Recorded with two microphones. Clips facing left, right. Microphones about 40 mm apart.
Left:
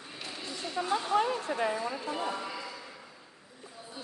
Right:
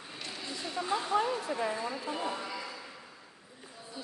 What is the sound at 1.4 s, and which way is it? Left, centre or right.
Speech, left.